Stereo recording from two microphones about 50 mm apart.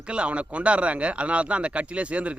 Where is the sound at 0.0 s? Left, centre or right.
Right.